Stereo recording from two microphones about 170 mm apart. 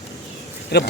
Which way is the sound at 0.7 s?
75° left (ahead or behind).